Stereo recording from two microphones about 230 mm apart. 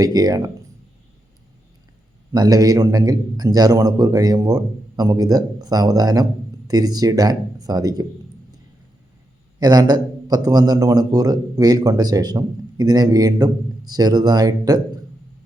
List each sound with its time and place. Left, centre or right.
0.0 s a man's voice: centre
2.3 s a man's voice: centre
9.6 s a man's voice: centre